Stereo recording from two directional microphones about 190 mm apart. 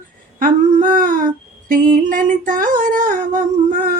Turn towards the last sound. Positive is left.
turn(degrees=-45)  # may be behind; listen again after turning